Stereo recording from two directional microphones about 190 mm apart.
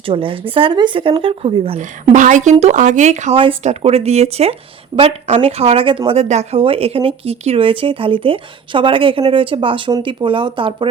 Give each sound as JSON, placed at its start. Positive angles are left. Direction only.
{"t": 0.0, "sound": "a woman's voice", "side_deg": -30}